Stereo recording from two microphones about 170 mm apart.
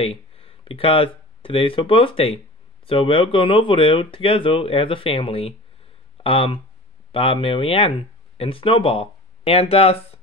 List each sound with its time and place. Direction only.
0.0 s speech: 35° left (ahead or behind)